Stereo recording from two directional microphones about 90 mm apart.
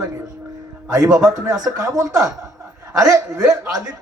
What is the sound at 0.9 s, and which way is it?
A man's voice, 40° right (ahead or behind).